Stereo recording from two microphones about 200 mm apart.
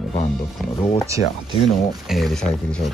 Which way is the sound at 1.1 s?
15° right (ahead or behind).